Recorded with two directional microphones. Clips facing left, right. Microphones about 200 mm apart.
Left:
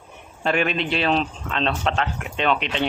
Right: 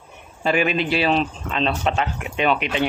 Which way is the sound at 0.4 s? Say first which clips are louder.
Right 2 dB; 5° right (ahead or behind).